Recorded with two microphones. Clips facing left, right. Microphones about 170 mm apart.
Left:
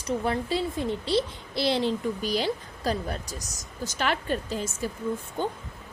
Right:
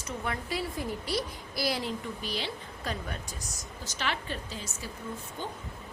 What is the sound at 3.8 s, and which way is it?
A woman's voice, 50° left (ahead or behind).